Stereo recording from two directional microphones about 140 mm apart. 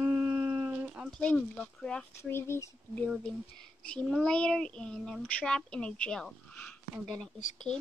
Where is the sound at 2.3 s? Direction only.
20° left (ahead or behind).